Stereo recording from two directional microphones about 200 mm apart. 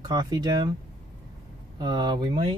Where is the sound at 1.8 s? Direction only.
20° right (ahead or behind).